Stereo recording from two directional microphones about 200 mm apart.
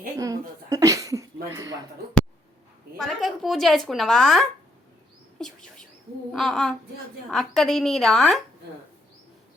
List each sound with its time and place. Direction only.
0.2 s cough: 15° right (ahead or behind)
3.0 s speech: centre (ahead or behind)
5.4 s a sound: centre (ahead or behind)
6.3 s speech: centre (ahead or behind)